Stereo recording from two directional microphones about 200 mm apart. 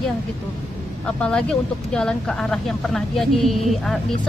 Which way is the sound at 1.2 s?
5° left (ahead or behind).